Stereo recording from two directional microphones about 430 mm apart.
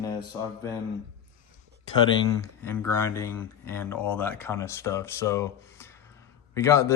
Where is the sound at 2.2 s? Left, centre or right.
Centre.